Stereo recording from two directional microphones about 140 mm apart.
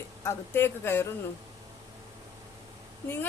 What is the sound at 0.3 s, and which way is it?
Speech, 15° left (ahead or behind).